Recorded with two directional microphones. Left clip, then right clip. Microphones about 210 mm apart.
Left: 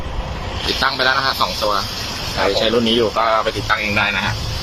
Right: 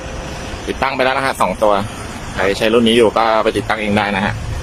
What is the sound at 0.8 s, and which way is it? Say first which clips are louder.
Speech: right 1 dB; 20° right (ahead or behind).